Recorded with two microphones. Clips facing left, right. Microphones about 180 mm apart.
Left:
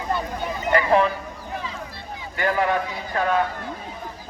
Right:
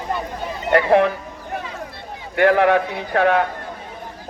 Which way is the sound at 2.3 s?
70° right (ahead or behind).